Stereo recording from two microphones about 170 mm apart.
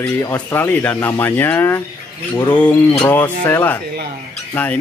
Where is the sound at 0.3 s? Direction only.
15° left (ahead or behind).